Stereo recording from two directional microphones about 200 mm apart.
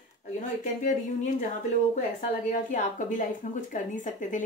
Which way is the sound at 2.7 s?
40° left (ahead or behind).